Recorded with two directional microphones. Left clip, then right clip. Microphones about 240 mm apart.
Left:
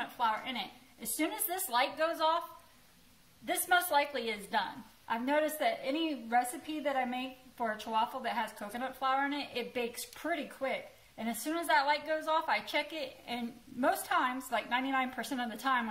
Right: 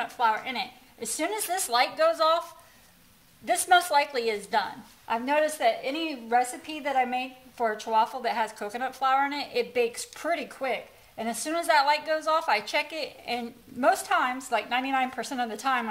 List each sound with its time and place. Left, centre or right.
0.0 s a woman's voice: right
3.4 s a woman's voice: right